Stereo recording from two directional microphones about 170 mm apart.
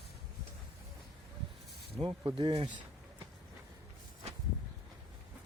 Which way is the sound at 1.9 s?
30° right (ahead or behind).